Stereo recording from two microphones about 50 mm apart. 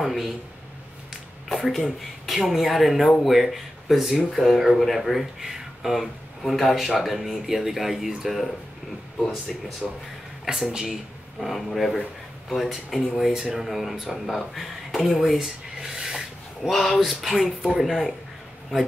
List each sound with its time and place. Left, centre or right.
0.0 s a man's voice: centre
1.7 s speech: centre
9.8 s speech: centre
10.4 s speech: centre
11.3 s speech: centre
13.2 s speech: centre
13.6 s speech: centre
16.6 s speech: centre